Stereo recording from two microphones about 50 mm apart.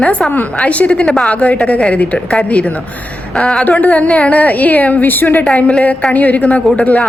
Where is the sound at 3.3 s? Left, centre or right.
Centre.